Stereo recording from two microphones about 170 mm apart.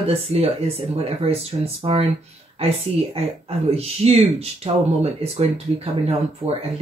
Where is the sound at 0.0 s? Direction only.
35° right (ahead or behind).